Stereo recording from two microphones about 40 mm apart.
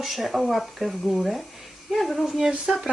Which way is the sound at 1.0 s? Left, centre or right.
Centre.